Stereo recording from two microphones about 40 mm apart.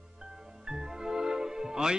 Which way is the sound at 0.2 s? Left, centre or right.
Centre.